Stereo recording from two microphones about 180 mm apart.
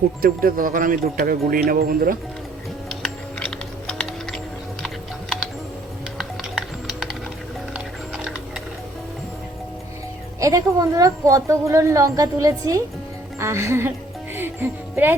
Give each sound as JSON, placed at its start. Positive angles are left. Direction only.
{"t": 0.2, "sound": "speech", "side_deg": -55}
{"t": 2.9, "sound": "typing", "side_deg": 5}
{"t": 6.1, "sound": "music", "side_deg": 0}
{"t": 10.4, "sound": "a woman's voice", "side_deg": -20}
{"t": 13.4, "sound": "music", "side_deg": -15}